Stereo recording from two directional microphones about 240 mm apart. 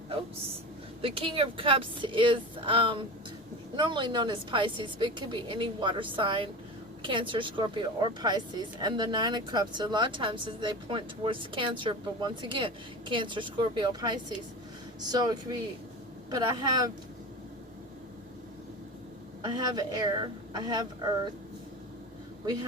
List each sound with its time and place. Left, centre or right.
1.0 s a woman's voice: right
19.4 s a woman's voice: centre